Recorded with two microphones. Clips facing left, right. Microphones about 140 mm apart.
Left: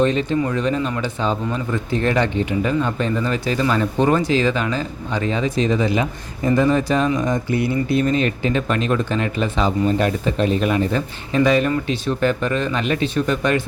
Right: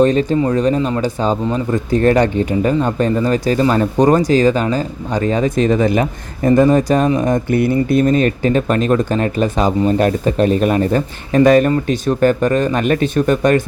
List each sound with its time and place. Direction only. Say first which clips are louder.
0.0 s speech: right 5 dB; 40° right (ahead or behind)